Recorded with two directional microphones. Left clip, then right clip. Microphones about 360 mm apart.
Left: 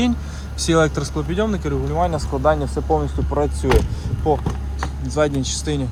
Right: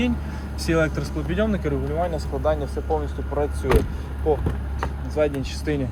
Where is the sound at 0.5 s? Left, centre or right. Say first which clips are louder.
Left 5 dB; centre.